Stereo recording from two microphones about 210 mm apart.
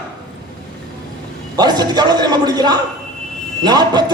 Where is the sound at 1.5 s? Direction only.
20° right (ahead or behind).